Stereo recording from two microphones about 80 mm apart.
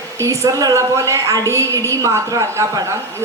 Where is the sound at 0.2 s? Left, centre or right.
Right.